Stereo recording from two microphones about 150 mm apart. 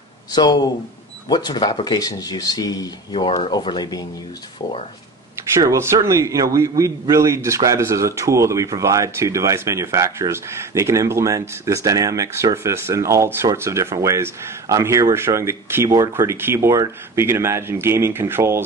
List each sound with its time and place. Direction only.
0.3 s speech: 25° left (ahead or behind)
5.5 s a man's voice: 20° right (ahead or behind)